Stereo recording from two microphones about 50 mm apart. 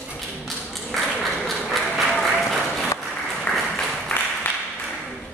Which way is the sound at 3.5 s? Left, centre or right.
Left.